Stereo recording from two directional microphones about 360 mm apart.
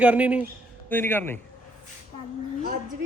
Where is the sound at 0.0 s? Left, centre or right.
Centre.